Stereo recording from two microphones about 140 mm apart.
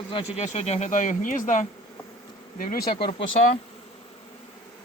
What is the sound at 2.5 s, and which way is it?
Speech, 90° left.